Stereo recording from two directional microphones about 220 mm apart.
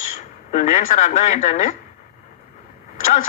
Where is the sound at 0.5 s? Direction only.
35° left (ahead or behind).